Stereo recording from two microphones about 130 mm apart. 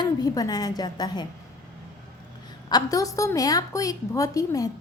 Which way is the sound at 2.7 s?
30° left (ahead or behind).